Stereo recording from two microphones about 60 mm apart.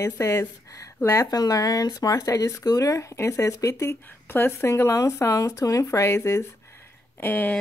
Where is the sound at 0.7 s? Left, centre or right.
Left.